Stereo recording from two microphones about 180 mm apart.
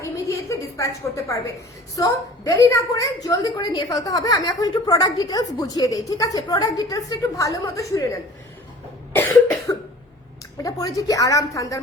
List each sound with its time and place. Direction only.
0.0 s a sound: 15° left (ahead or behind)
2.0 s a woman's voice: 20° left (ahead or behind)
9.1 s cough: 10° left (ahead or behind)
10.6 s a woman's voice: 20° left (ahead or behind)